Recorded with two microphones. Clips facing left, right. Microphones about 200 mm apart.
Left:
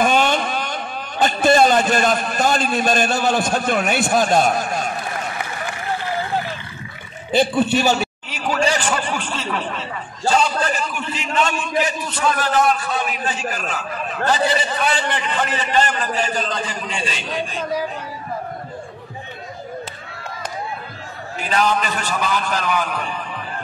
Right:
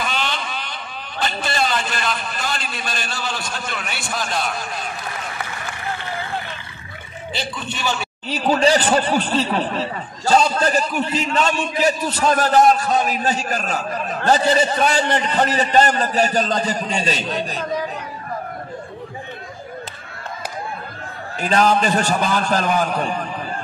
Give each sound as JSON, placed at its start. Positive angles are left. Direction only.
{"t": 0.0, "sound": "a man's voice", "side_deg": 50}
{"t": 7.7, "sound": "a man's voice", "side_deg": 40}
{"t": 8.3, "sound": "speech", "side_deg": -35}
{"t": 21.5, "sound": "speech", "side_deg": -40}